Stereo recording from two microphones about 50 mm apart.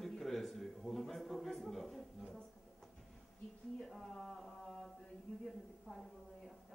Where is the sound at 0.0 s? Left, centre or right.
Centre.